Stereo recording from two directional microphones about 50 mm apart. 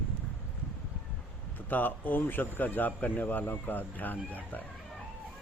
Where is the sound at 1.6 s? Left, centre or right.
Left.